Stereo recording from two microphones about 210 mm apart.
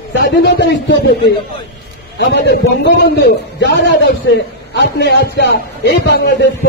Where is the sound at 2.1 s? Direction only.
55° left (ahead or behind).